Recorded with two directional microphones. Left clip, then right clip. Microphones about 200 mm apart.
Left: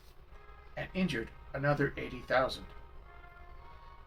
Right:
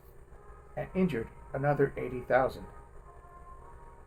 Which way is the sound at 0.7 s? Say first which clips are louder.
Right 4 dB; 45° right (ahead or behind).